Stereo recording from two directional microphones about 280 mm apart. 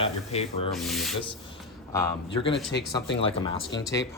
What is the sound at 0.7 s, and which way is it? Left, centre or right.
Speech, centre.